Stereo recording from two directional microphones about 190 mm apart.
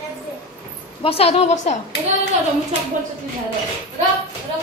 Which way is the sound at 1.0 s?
30° left (ahead or behind).